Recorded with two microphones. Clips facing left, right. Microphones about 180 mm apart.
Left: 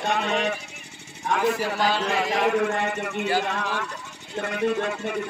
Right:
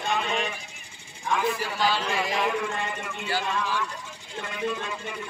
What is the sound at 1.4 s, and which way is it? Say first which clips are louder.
A man's voice: left 4 dB; 45° left (ahead or behind).